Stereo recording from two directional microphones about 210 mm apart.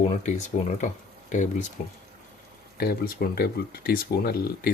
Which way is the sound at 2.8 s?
45° left (ahead or behind).